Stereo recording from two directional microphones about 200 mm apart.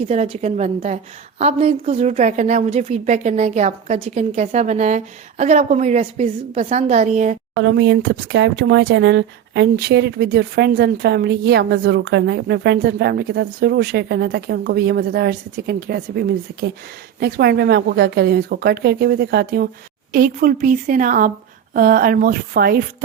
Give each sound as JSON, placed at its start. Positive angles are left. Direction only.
{"t": 0.1, "sound": "a woman's voice", "side_deg": -35}
{"t": 7.6, "sound": "a woman's voice", "side_deg": -70}